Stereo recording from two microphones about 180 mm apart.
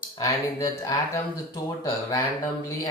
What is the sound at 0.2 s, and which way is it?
Speech, 20° left (ahead or behind).